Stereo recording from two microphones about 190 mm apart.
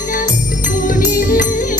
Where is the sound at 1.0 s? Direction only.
40° left (ahead or behind).